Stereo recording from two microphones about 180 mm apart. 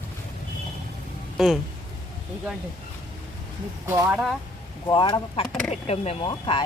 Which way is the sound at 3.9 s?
10° right (ahead or behind).